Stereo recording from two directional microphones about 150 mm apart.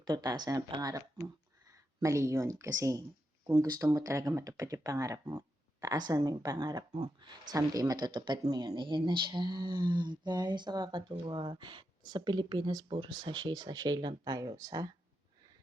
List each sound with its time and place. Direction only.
0.0 s speech: 25° right (ahead or behind)